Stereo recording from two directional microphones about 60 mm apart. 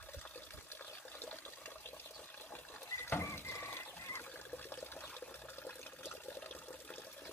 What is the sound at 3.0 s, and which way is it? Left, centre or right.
Water, left.